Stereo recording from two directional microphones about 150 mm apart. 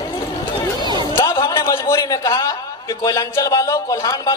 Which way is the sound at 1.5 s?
20° left (ahead or behind).